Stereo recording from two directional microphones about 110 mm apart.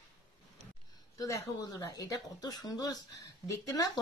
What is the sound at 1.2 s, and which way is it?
Speech, 30° left (ahead or behind).